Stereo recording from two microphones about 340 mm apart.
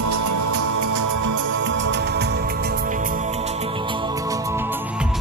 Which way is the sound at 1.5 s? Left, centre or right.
Right.